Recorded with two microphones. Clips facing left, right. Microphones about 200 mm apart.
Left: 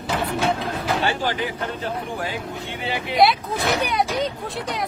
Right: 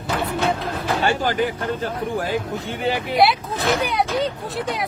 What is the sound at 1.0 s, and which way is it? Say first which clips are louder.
Speech: right 3 dB; 45° right (ahead or behind).